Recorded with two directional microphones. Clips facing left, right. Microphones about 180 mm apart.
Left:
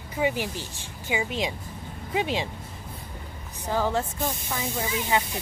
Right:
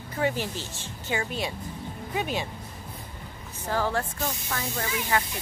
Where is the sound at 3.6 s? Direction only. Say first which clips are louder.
Left 2 dB; 15° left (ahead or behind).